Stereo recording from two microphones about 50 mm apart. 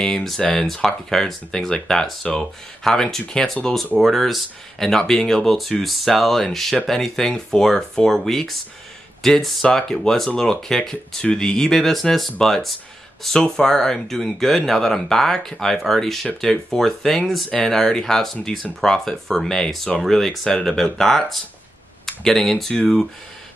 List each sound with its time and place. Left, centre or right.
0.0 s speech: centre